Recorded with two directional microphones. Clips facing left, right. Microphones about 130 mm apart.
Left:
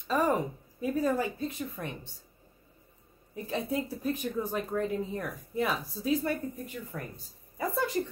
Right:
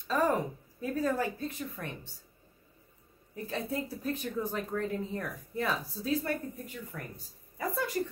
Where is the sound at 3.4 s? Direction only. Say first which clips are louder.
Left 3 dB; 15° left (ahead or behind).